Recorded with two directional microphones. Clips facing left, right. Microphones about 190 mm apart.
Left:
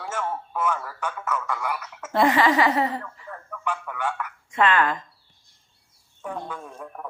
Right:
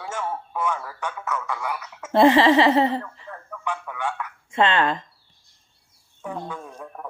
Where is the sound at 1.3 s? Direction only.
Centre (ahead or behind).